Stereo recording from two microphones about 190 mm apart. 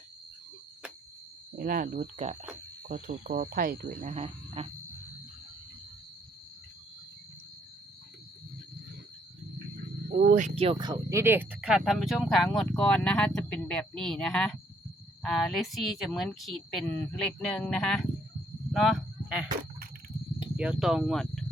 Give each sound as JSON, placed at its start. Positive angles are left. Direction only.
{"t": 1.5, "sound": "speech", "side_deg": -45}
{"t": 2.8, "sound": "speech", "side_deg": -45}
{"t": 10.1, "sound": "speech", "side_deg": -50}
{"t": 18.7, "sound": "a sound", "side_deg": 0}
{"t": 20.6, "sound": "speech", "side_deg": -5}